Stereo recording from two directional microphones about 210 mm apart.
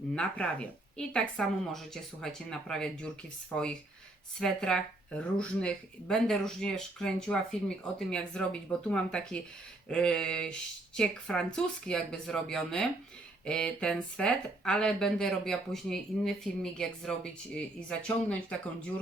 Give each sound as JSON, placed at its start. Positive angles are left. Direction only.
{"t": 0.1, "sound": "speech", "side_deg": 5}